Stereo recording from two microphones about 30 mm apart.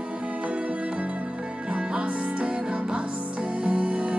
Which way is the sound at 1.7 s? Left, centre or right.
Right.